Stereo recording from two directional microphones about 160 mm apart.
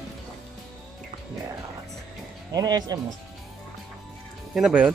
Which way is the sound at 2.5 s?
25° right (ahead or behind).